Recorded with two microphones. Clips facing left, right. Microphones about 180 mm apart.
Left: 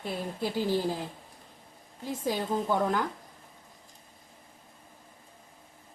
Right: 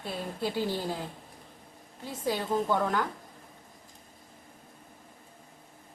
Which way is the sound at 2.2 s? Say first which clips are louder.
Right 1 dB; 15° left (ahead or behind).